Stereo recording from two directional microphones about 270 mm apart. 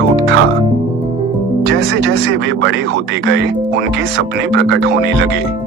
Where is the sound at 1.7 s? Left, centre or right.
Right.